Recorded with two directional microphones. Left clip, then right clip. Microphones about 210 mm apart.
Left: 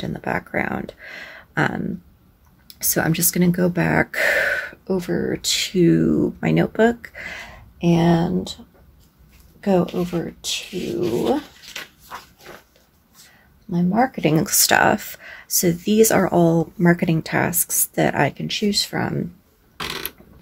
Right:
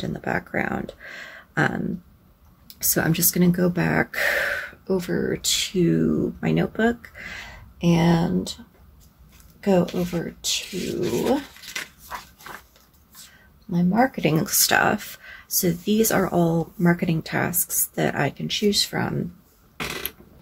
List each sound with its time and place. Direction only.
0.0 s speech: 10° left (ahead or behind)
9.6 s speech: 15° left (ahead or behind)
11.7 s a sound: 15° right (ahead or behind)
13.7 s speech: 15° left (ahead or behind)